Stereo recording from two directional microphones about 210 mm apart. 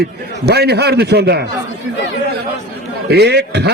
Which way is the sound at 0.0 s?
50° right (ahead or behind).